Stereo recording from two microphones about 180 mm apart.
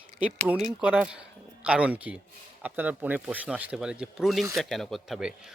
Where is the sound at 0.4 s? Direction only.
5° right (ahead or behind).